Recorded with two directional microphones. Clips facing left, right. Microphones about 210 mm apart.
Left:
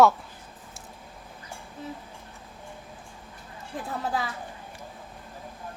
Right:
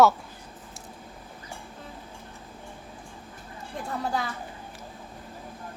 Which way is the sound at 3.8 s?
Centre (ahead or behind).